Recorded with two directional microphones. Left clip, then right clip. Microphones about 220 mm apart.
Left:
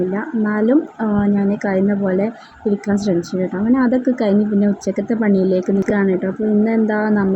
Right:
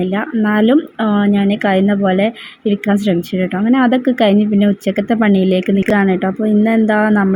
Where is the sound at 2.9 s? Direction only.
35° right (ahead or behind).